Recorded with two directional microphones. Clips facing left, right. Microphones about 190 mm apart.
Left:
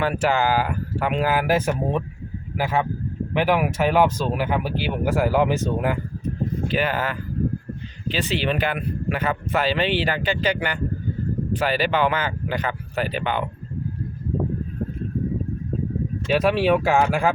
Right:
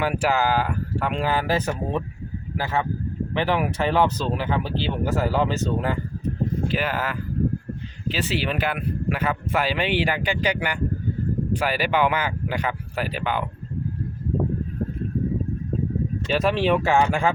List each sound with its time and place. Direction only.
0.0 s speech: 10° right (ahead or behind); by 6.0 s 10° left (ahead or behind)
6.7 s speech: centre (ahead or behind)
16.2 s speech: 5° left (ahead or behind)